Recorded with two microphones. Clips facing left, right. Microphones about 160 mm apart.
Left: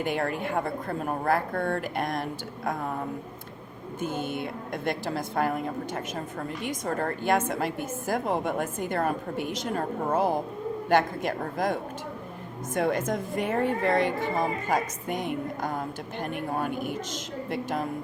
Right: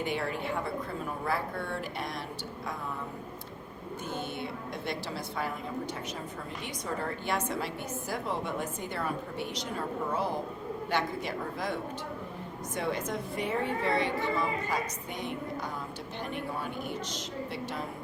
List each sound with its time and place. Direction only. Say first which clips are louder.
0.0 s a woman's voice: left 4 dB; 50° left (ahead or behind)
4.2 s a woman's voice: left 5 dB; 50° left (ahead or behind)